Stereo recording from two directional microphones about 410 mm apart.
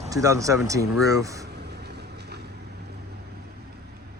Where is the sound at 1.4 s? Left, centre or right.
Right.